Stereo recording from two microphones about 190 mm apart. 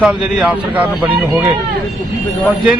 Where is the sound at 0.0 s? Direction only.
5° right (ahead or behind).